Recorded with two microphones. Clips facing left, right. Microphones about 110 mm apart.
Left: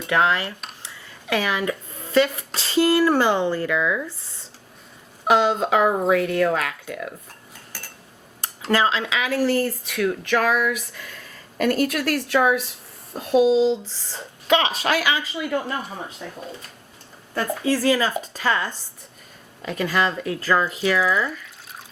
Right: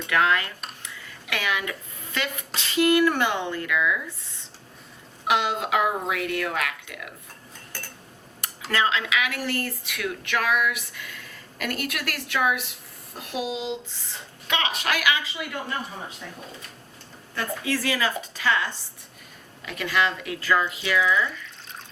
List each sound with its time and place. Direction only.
0.1 s speech: 30° left (ahead or behind)
0.8 s a sound: 35° left (ahead or behind)
2.1 s speech: 35° left (ahead or behind)
8.4 s speech: 30° left (ahead or behind)
17.3 s speech: 40° left (ahead or behind)